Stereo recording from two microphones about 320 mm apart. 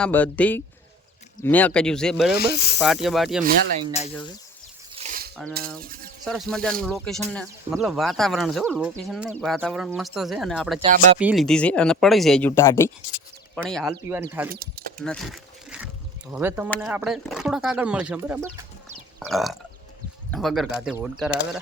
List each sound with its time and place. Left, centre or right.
0.0 s speech: centre
2.4 s speech: left
2.8 s speech: centre
3.4 s speech: centre
3.9 s speech: centre
4.9 s a sound: right
5.8 s speech: right
6.2 s speech: centre
14.5 s speech: right
14.9 s a sound: centre
16.3 s speech: centre
16.6 s speech: centre